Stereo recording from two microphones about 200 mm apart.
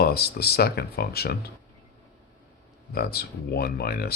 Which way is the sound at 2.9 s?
50° left (ahead or behind).